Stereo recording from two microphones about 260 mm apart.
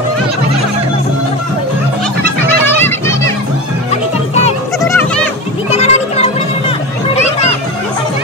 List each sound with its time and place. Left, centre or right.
3.9 s music: left
4.8 s goat: centre
5.7 s a sound: left